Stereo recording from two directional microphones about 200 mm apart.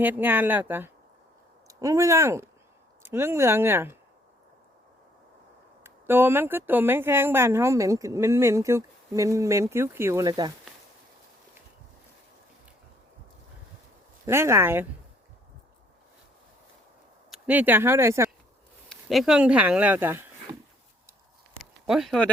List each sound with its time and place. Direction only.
0.0 s speech: 10° right (ahead or behind)
5.8 s speech: 10° right (ahead or behind)
14.3 s speech: 15° right (ahead or behind)
17.3 s speech: 5° right (ahead or behind)
18.9 s speech: centre (ahead or behind)
21.6 s a sound: centre (ahead or behind)